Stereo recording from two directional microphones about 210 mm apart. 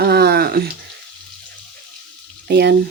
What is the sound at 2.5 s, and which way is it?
Speech, 50° right (ahead or behind).